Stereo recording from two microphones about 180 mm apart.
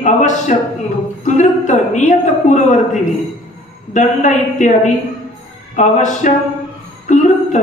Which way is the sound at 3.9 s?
40° left (ahead or behind).